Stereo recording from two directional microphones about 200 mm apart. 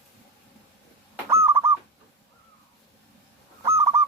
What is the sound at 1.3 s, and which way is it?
Bird, 15° right (ahead or behind).